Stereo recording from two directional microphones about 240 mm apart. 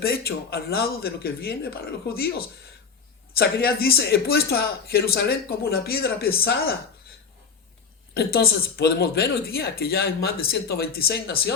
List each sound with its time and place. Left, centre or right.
0.0 s speech: left
8.1 s speech: left